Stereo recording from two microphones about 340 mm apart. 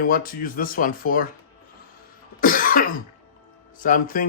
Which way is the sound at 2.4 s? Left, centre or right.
Left.